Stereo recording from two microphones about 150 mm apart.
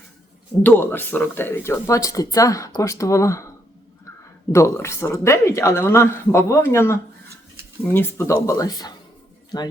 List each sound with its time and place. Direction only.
0.6 s speech: 15° left (ahead or behind)
4.5 s speech: 20° left (ahead or behind)